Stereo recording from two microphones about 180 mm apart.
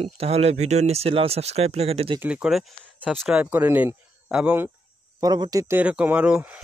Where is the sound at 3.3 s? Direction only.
10° right (ahead or behind).